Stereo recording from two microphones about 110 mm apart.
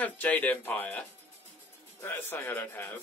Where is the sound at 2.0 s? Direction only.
20° left (ahead or behind).